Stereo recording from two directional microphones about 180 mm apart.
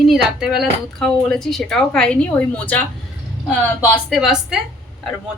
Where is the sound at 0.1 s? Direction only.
Centre (ahead or behind).